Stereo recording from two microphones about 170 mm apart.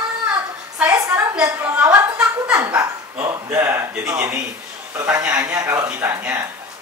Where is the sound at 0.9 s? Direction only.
15° right (ahead or behind).